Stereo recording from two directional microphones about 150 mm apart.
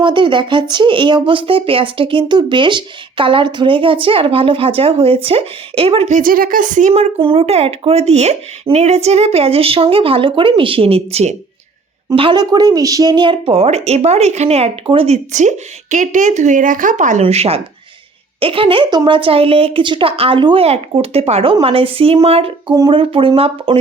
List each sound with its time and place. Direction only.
0.0 s speech: 30° right (ahead or behind)
6.1 s speech: 70° right (ahead or behind); by 11.3 s 45° right (ahead or behind)
12.1 s speech: 35° right (ahead or behind)